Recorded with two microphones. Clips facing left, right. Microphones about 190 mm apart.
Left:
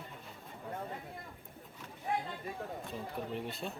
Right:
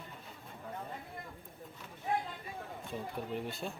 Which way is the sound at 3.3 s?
Centre (ahead or behind).